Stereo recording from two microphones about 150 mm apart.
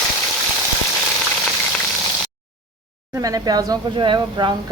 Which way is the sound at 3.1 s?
25° right (ahead or behind).